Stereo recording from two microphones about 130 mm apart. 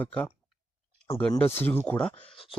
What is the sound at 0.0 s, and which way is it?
Speech, 10° left (ahead or behind).